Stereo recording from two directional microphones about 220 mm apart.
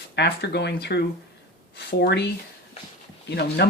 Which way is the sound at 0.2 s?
50° left (ahead or behind).